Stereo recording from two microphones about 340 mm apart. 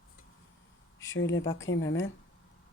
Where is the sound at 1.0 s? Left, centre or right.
Left.